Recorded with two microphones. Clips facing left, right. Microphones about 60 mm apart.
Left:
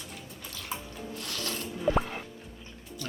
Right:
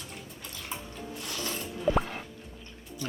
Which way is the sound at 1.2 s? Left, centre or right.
Centre.